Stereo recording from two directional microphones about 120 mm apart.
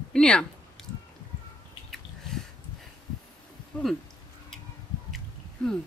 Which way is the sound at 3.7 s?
10° left (ahead or behind).